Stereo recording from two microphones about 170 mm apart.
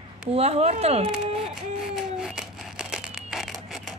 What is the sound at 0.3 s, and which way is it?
Speech, 40° right (ahead or behind).